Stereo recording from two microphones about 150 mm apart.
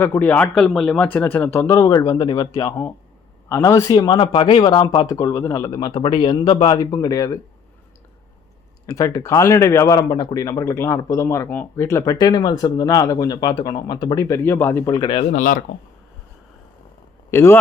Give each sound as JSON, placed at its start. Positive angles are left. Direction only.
{"t": 0.0, "sound": "speech", "side_deg": 15}
{"t": 9.0, "sound": "speech", "side_deg": 20}
{"t": 15.2, "sound": "speech", "side_deg": 55}
{"t": 17.3, "sound": "speech", "side_deg": 15}